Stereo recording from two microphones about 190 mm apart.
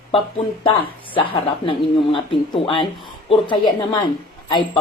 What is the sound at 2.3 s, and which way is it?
Speech, 25° left (ahead or behind).